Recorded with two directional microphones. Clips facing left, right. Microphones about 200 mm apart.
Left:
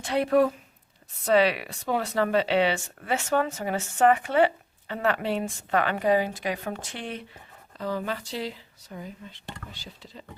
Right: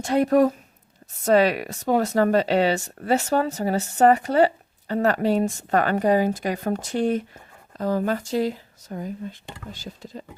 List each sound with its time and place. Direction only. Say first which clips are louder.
0.0 s speech: right 4 dB; 45° right (ahead or behind)